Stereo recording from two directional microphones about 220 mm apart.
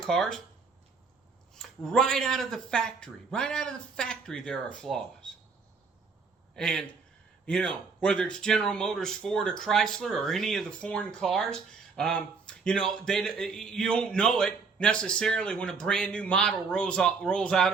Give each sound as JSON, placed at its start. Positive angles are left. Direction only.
{"t": 0.0, "sound": "speech", "side_deg": 5}
{"t": 1.5, "sound": "speech", "side_deg": 0}
{"t": 6.6, "sound": "a man's voice", "side_deg": 5}